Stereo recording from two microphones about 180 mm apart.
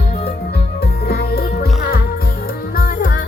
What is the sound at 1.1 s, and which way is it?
Music, 60° left (ahead or behind).